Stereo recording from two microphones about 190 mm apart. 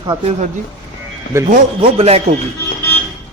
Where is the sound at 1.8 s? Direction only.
30° right (ahead or behind).